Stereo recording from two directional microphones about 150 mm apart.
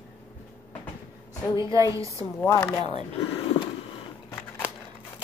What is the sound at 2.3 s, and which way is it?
Speech, 15° left (ahead or behind).